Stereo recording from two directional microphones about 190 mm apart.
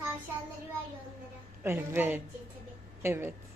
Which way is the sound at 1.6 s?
10° right (ahead or behind).